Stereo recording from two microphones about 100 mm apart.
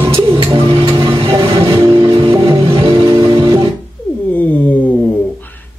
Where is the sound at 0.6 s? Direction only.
60° right (ahead or behind).